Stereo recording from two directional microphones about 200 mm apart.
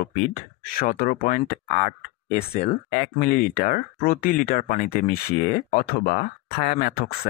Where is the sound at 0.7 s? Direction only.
45° left (ahead or behind).